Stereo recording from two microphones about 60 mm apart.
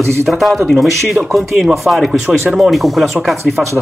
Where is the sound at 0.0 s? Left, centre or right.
Right.